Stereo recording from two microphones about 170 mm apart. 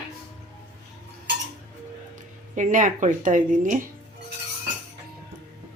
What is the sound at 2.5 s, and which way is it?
A woman's voice, 50° right (ahead or behind).